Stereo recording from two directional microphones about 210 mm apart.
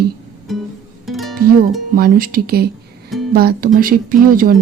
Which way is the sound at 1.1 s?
Centre (ahead or behind).